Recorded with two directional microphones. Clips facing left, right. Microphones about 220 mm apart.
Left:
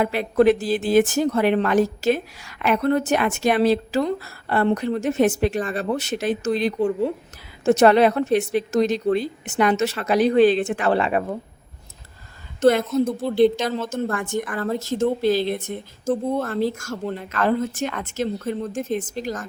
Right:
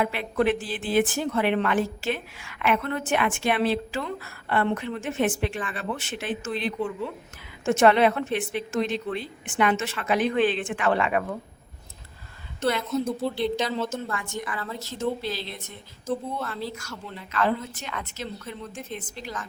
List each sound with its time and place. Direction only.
0.0 s speech: 40° left (ahead or behind)
12.5 s a woman's voice: 45° left (ahead or behind)